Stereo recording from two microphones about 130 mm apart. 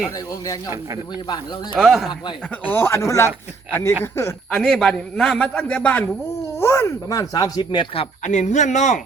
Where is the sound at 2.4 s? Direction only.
10° left (ahead or behind).